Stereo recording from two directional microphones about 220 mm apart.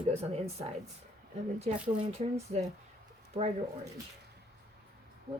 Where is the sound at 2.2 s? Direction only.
30° right (ahead or behind).